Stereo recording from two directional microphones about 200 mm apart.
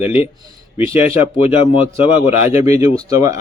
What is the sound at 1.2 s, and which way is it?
Speech, 30° left (ahead or behind).